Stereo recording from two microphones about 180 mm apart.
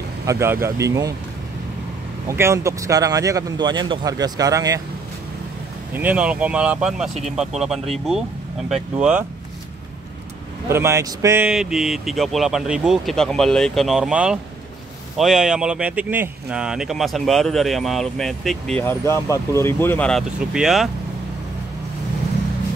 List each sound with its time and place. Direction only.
0.3 s speech: 15° right (ahead or behind)
2.2 s a man's voice: 15° right (ahead or behind)
5.9 s speech: 10° right (ahead or behind)
10.7 s speech: 15° right (ahead or behind)
11.4 s speech: 5° right (ahead or behind)
18.9 s speech: 15° left (ahead or behind); by 20.9 s centre (ahead or behind)